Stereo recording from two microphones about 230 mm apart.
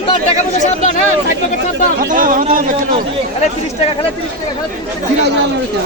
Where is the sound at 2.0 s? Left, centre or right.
Right.